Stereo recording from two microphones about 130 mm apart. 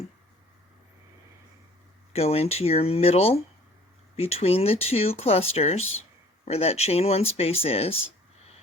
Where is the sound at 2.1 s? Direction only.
50° left (ahead or behind).